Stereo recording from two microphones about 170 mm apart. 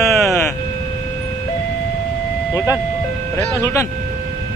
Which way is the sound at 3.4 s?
10° left (ahead or behind).